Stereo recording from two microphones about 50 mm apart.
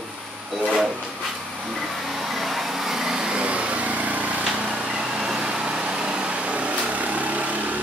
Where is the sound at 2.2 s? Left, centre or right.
Centre; by 4.2 s right.